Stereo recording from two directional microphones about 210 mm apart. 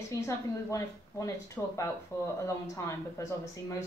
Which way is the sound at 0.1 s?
15° left (ahead or behind).